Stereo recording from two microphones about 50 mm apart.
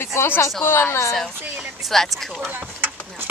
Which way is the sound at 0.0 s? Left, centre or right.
Left.